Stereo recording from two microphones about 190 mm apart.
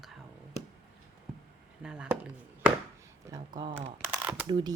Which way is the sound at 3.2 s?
20° right (ahead or behind).